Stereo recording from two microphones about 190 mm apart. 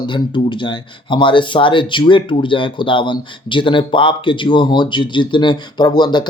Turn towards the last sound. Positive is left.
turn(degrees=25)  # may be behind; listen again after turning